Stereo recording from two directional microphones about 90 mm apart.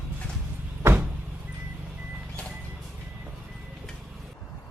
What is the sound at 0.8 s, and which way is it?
Door, 25° right (ahead or behind).